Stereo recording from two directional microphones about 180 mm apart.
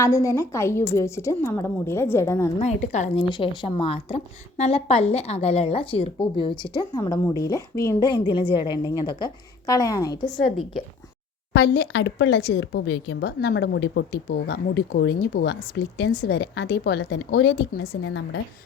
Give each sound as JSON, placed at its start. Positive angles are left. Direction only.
{"t": 0.0, "sound": "a woman's voice", "side_deg": 15}
{"t": 2.6, "sound": "a woman's voice", "side_deg": 40}
{"t": 3.2, "sound": "a woman's voice", "side_deg": 25}
{"t": 10.4, "sound": "a woman's voice", "side_deg": 35}
{"t": 11.5, "sound": "speech", "side_deg": 65}